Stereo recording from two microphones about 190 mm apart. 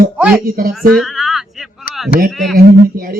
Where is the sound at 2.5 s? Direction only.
50° right (ahead or behind).